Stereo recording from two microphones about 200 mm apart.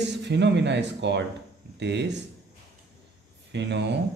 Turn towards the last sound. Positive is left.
turn(degrees=-60)  # may be behind; listen again after turning